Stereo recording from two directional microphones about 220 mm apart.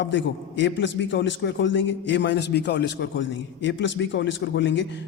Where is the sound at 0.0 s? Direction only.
55° left (ahead or behind).